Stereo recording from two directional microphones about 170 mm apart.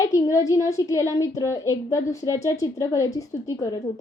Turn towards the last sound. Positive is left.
turn(degrees=20)  # may be behind; listen again after turning